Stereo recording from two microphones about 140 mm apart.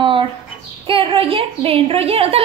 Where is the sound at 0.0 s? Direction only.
35° right (ahead or behind).